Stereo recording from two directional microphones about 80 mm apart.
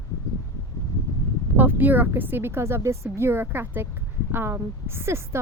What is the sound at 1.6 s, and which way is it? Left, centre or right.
Speech, right.